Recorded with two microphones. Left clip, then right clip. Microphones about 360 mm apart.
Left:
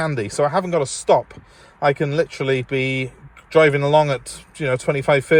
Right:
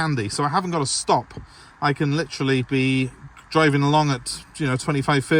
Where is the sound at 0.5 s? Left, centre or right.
Centre.